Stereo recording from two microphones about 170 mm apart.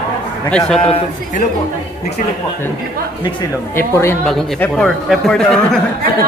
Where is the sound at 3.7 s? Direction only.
15° left (ahead or behind).